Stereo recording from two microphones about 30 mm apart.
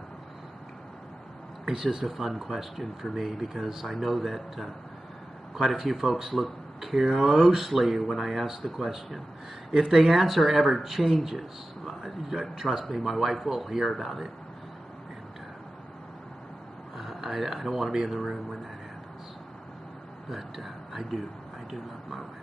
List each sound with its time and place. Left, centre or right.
2.0 s speech: centre
3.8 s speech: centre
5.7 s speech: centre
5.9 s speech: right
6.2 s speech: centre
7.1 s speech: centre
7.6 s speech: centre
9.7 s speech: right
9.9 s speech: centre
12.0 s a man's voice: centre
12.6 s speech: centre
16.9 s speech: centre
20.2 s speech: centre